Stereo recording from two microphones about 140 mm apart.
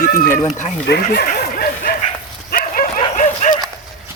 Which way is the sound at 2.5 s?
90° left.